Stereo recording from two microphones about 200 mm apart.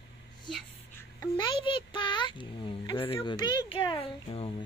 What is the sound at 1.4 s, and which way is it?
Speech, 25° left (ahead or behind).